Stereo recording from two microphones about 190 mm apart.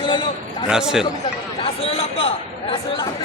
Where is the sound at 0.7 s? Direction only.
5° right (ahead or behind).